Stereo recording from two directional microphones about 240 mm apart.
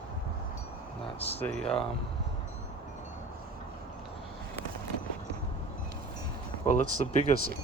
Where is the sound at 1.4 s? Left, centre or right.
Centre.